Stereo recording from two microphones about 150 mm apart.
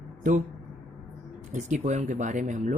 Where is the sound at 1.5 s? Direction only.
55° right (ahead or behind).